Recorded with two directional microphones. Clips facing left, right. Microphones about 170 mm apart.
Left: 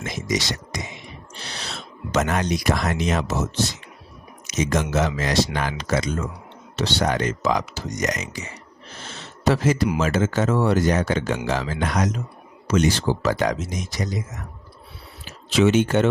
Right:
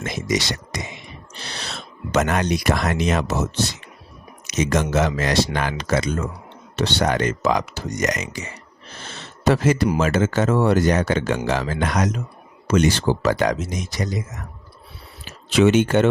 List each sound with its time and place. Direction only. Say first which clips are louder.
0.0 s speech: right 2 dB; 65° right (ahead or behind)
2.1 s speech: right 2 dB; 65° right (ahead or behind)
15.2 s speech: right 2 dB; 60° right (ahead or behind)